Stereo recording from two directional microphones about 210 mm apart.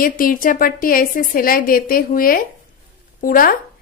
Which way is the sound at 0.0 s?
40° left (ahead or behind).